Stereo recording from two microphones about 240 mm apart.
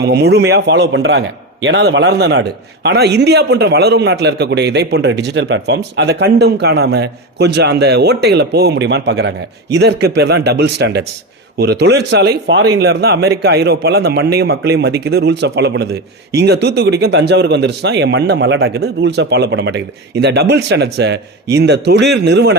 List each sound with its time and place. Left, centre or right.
0.0 s a man's voice: right